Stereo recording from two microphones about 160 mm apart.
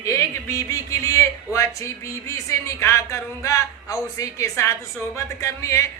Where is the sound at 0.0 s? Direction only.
20° left (ahead or behind).